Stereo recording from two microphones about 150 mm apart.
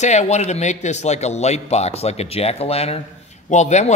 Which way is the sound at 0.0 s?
50° left (ahead or behind).